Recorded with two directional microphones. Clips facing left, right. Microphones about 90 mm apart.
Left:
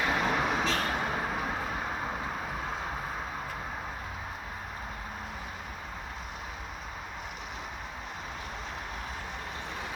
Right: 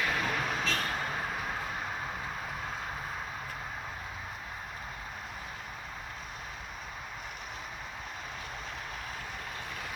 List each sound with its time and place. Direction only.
0.0 s vehicle: 20° left (ahead or behind)